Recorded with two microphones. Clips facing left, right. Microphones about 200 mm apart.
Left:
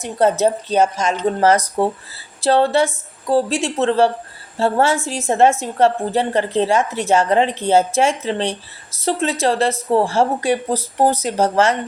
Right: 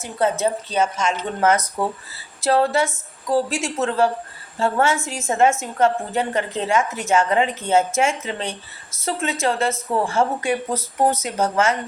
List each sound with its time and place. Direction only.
0.0 s speech: 70° left (ahead or behind)
0.7 s a woman's voice: 40° left (ahead or behind)